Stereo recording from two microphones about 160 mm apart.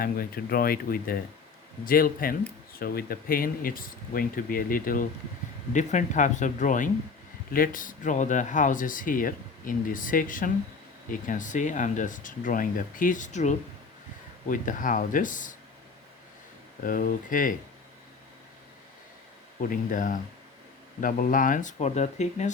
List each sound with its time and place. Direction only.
0.0 s speech: 65° left (ahead or behind)
5.7 s speech: 50° left (ahead or behind)
16.8 s speech: 60° left (ahead or behind)
19.6 s speech: 60° left (ahead or behind)